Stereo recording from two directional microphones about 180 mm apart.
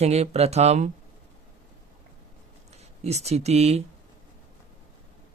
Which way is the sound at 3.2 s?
35° right (ahead or behind).